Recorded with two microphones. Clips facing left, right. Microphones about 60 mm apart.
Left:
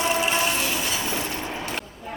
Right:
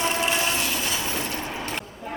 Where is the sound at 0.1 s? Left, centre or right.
Centre.